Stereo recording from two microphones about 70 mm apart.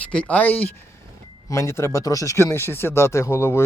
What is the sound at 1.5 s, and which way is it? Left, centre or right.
Speech, left.